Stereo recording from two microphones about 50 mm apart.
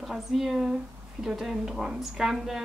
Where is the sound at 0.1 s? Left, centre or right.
Centre.